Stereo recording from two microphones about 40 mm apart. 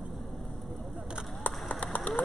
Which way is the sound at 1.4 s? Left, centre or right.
Left.